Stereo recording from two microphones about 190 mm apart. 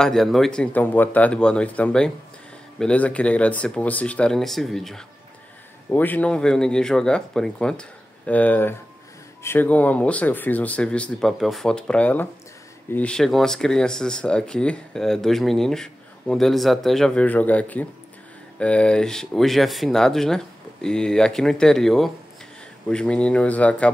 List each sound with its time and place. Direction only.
0.0 s speech: centre (ahead or behind)